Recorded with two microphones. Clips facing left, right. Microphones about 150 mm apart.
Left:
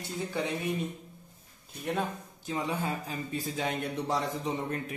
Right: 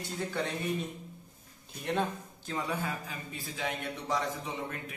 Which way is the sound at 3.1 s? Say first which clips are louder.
Left 7 dB; 40° left (ahead or behind).